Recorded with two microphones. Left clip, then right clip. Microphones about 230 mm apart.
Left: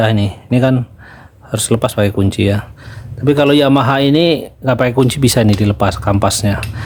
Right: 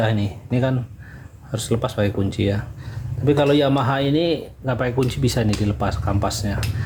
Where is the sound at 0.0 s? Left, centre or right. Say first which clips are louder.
Left 8 dB; left.